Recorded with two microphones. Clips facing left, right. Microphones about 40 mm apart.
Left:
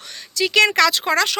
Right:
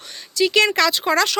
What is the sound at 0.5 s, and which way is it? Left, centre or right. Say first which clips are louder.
Speech: left 3 dB; left.